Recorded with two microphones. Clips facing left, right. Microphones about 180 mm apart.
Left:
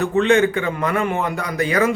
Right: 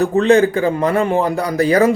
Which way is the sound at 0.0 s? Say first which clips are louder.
Right 4 dB; 35° right (ahead or behind).